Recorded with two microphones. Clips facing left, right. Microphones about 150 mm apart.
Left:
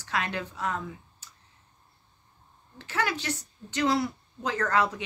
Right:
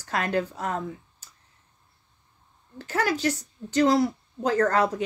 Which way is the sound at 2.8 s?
40° right (ahead or behind).